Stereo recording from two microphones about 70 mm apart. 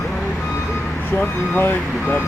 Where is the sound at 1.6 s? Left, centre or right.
Left.